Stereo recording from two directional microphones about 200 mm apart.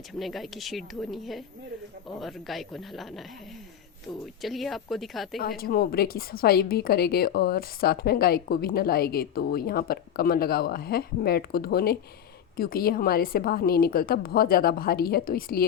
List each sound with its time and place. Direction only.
0.1 s speech: centre (ahead or behind)
4.4 s speech: centre (ahead or behind)
5.4 s a woman's voice: 50° left (ahead or behind)